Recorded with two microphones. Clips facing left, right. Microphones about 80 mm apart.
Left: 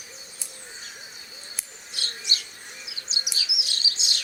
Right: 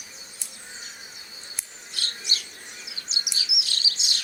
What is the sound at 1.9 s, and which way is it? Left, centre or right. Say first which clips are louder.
Bird: even; left.